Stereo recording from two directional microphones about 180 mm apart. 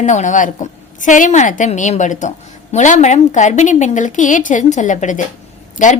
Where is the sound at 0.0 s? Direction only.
40° left (ahead or behind).